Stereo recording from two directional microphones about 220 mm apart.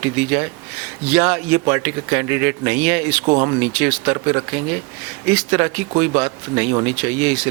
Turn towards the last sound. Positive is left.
turn(degrees=-10)  # may be behind; listen again after turning